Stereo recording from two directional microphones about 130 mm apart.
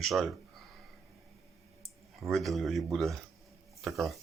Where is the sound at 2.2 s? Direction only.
Centre (ahead or behind).